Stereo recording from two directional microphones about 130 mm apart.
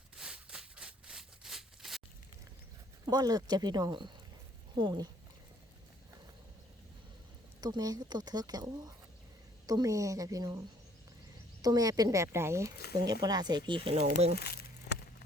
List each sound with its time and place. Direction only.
0.2 s a sound: 5° right (ahead or behind)
3.1 s speech: 30° right (ahead or behind)
7.6 s speech: 30° right (ahead or behind)
11.6 s speech: 30° right (ahead or behind); by 14.3 s 55° right (ahead or behind)